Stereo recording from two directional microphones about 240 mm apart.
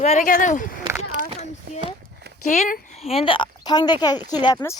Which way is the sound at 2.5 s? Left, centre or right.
Left.